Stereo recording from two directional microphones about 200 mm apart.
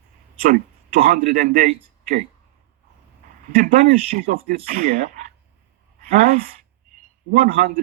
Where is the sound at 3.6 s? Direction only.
40° right (ahead or behind).